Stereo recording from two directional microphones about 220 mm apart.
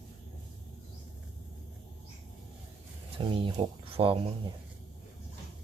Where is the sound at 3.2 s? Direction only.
25° right (ahead or behind).